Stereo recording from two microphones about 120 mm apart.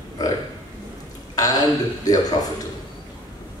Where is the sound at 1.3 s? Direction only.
30° left (ahead or behind).